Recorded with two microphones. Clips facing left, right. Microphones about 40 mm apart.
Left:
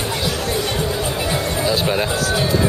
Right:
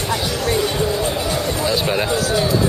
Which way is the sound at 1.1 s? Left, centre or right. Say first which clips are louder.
Even; centre.